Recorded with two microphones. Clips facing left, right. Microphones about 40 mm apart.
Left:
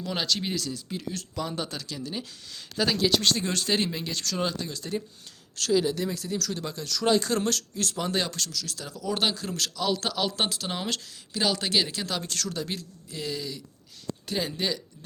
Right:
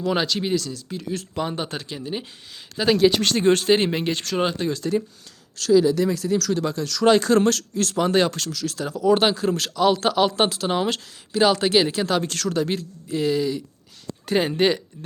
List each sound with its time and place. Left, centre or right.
0.0 s speech: right
0.5 s speech: centre
1.1 s speech: right
3.2 s speech: right
6.1 s speech: right
12.1 s speech: right